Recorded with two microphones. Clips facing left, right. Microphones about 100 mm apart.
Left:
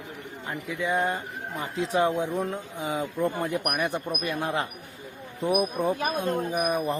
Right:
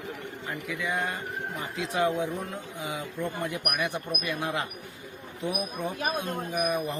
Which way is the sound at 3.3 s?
45° left (ahead or behind).